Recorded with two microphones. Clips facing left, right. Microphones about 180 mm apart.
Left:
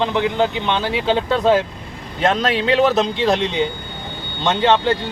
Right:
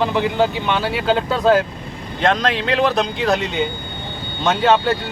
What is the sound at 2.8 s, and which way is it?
Speech, centre (ahead or behind).